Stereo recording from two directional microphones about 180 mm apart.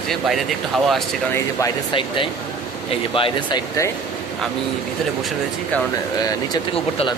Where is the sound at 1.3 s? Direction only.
15° left (ahead or behind).